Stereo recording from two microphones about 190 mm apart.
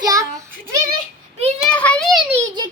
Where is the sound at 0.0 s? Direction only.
20° right (ahead or behind).